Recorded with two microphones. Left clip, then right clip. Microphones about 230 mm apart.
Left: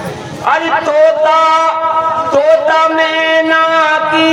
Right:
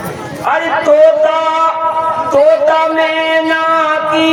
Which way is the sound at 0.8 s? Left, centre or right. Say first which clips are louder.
Right 5 dB; left.